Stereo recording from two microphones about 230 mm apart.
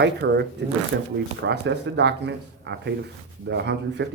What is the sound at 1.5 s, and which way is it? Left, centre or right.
Speech, right.